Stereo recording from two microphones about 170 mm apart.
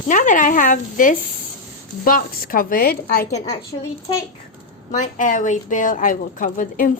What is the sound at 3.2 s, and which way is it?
Speech, 40° left (ahead or behind).